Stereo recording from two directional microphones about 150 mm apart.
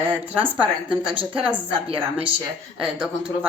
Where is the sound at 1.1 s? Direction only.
35° right (ahead or behind).